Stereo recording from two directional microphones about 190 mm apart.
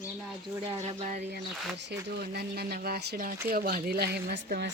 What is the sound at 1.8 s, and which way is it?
Speech, 60° right (ahead or behind).